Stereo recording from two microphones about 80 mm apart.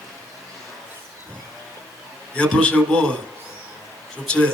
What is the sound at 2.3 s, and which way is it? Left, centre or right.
Speech, centre.